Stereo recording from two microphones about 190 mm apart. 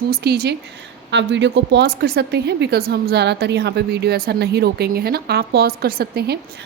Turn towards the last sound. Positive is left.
turn(degrees=-55)  # may be behind; listen again after turning